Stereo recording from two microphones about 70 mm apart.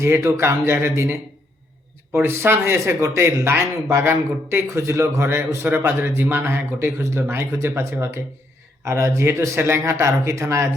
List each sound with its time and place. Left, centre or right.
0.0 s speech: right
2.1 s speech: right
5.6 s speech: right